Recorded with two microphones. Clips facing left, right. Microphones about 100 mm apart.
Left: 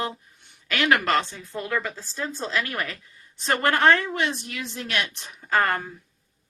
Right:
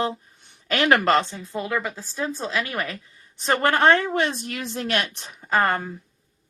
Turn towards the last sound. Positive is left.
turn(degrees=-20)  # may be behind; listen again after turning